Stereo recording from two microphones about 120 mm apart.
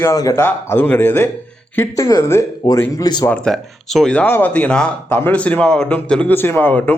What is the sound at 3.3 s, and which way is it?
A man's voice, 5° left (ahead or behind).